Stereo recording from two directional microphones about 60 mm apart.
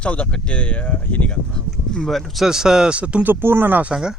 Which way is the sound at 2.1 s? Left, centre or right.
Centre.